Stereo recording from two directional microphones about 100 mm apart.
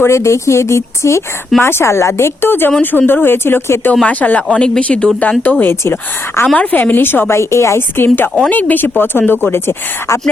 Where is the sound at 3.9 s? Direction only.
15° left (ahead or behind).